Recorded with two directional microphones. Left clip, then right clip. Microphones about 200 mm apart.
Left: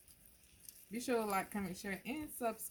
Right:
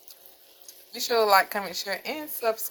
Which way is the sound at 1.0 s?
15° right (ahead or behind).